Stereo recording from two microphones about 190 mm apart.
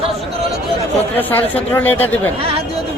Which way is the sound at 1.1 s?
10° left (ahead or behind).